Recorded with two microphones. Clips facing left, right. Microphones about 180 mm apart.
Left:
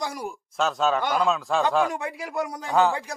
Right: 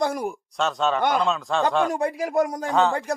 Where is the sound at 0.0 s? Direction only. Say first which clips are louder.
Right 7 dB; 55° right (ahead or behind).